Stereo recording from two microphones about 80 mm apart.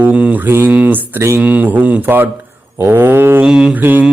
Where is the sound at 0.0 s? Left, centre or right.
Centre.